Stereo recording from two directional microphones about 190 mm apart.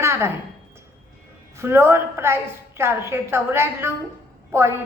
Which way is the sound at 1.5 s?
15° right (ahead or behind).